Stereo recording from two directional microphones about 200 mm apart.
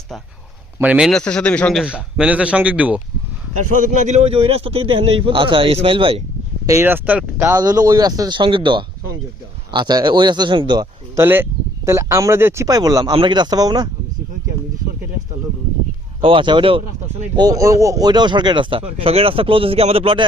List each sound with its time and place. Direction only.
0.8 s a man's voice: 5° right (ahead or behind)
3.7 s speech: 40° right (ahead or behind)
6.7 s speech: 10° right (ahead or behind)
16.2 s speech: 25° right (ahead or behind)